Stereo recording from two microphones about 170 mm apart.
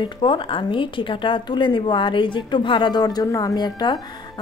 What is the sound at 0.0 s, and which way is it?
A woman's voice, 30° left (ahead or behind).